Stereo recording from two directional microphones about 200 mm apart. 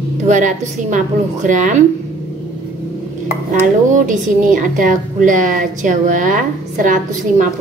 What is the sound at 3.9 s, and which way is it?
Speech, 40° right (ahead or behind).